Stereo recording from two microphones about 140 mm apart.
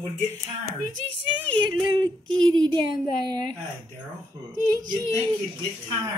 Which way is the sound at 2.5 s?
30° right (ahead or behind).